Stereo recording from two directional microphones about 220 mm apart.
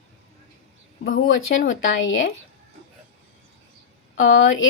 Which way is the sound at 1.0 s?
65° left (ahead or behind).